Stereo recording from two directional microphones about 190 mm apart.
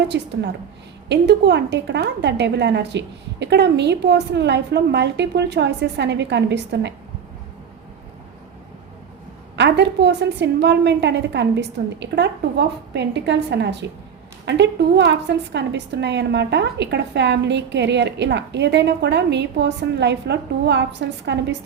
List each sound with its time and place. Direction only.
0.1 s a woman's voice: 65° right (ahead or behind)
9.6 s a woman's voice: 65° right (ahead or behind)